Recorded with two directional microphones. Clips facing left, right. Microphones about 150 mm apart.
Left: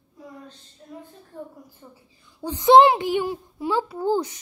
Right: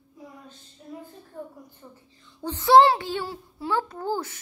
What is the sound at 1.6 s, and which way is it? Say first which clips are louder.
A child's voice: even; 10° left (ahead or behind).